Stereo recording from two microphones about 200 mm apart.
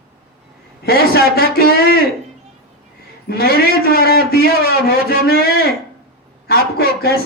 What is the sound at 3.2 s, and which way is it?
A man's voice, 50° left (ahead or behind).